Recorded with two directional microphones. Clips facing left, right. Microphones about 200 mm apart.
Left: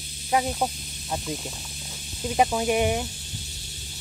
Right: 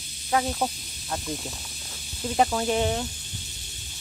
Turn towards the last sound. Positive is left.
turn(degrees=15)  # may be behind; listen again after turning